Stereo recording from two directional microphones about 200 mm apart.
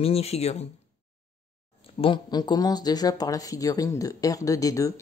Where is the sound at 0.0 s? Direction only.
30° left (ahead or behind).